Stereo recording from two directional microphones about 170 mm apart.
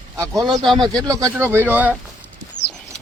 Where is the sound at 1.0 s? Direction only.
20° right (ahead or behind).